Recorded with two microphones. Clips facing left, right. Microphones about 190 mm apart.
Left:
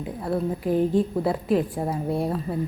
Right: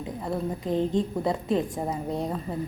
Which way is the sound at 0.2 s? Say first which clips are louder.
Left 5 dB; 5° left (ahead or behind).